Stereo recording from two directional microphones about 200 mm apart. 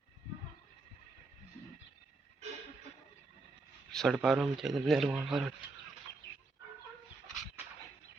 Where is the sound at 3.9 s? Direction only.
Centre (ahead or behind).